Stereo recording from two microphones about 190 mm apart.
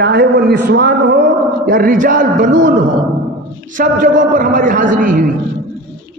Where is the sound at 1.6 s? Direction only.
50° right (ahead or behind).